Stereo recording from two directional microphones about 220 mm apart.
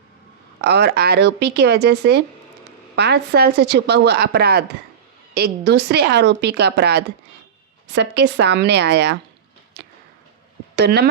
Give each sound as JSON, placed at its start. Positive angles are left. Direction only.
{"t": 0.6, "sound": "a woman's voice", "side_deg": -50}
{"t": 10.8, "sound": "a woman's voice", "side_deg": -50}